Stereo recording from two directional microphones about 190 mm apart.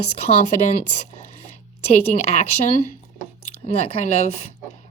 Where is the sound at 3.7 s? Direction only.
35° left (ahead or behind).